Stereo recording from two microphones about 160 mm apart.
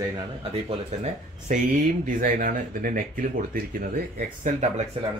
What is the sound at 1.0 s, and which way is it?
Speech, 50° right (ahead or behind).